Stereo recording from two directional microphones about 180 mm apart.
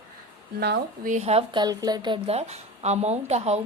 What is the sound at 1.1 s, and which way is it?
A woman's voice, 40° right (ahead or behind).